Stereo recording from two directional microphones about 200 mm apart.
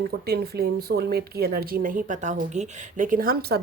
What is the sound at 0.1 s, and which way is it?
Speech, 50° right (ahead or behind).